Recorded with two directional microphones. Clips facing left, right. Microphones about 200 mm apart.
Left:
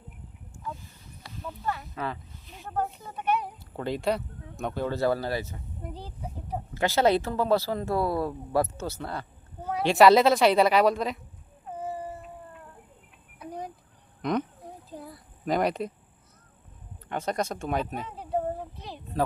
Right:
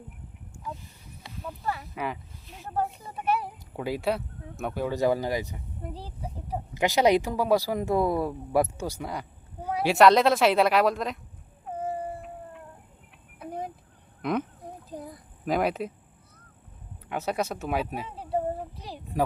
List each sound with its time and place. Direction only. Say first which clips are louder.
1.6 s a sound: even; 10° right (ahead or behind)
2.5 s speech: right 1 dB; 5° right (ahead or behind)
5.8 s a woman's voice: right 1 dB; 5° right (ahead or behind)
6.7 s speech: right 1 dB; 15° right (ahead or behind)
9.9 s a woman's voice: left 1 dB; centre (ahead or behind)
14.2 s fowl: even; 5° right (ahead or behind)
14.8 s a sound: right 3 dB; 20° right (ahead or behind)
15.4 s a woman's voice: even; 5° right (ahead or behind)
17.1 s speech: even; 5° right (ahead or behind)
18.8 s a sound: right 1 dB; 10° right (ahead or behind)